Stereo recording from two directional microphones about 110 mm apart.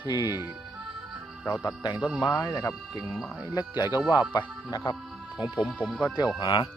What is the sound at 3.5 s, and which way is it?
Speech, 35° left (ahead or behind).